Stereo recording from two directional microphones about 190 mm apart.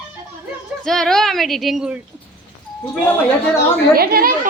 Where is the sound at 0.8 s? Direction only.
Centre (ahead or behind).